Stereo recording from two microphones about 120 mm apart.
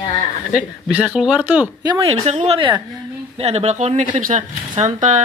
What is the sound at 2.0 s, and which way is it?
Speech, 60° right (ahead or behind).